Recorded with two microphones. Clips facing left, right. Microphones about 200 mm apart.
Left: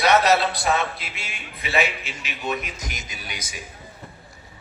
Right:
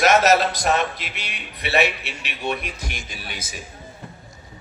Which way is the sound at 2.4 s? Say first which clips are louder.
Right 1 dB; 30° right (ahead or behind).